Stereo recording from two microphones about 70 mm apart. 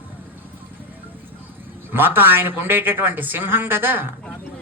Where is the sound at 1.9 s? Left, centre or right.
Right.